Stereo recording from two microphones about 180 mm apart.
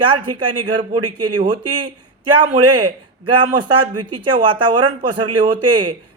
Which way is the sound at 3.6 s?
25° right (ahead or behind).